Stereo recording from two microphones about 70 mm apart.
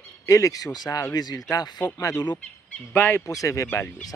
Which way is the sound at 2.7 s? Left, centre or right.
Left.